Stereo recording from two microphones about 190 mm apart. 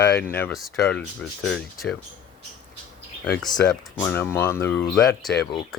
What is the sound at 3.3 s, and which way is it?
Speech, centre (ahead or behind).